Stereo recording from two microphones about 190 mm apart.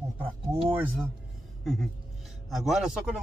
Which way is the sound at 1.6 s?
Centre (ahead or behind).